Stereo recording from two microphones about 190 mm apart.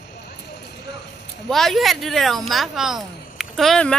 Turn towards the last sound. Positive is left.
turn(degrees=5)  # may be behind; listen again after turning